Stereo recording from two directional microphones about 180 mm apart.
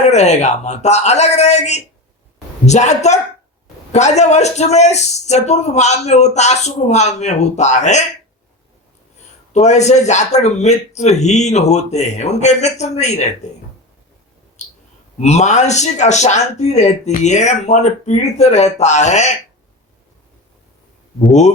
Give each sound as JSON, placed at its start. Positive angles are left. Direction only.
{"t": 0.1, "sound": "speech", "side_deg": 40}
{"t": 9.5, "sound": "speech", "side_deg": 40}
{"t": 14.6, "sound": "clicking", "side_deg": 40}
{"t": 15.2, "sound": "speech", "side_deg": 40}